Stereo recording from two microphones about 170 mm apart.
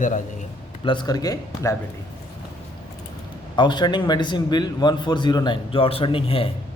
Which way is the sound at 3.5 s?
25° left (ahead or behind).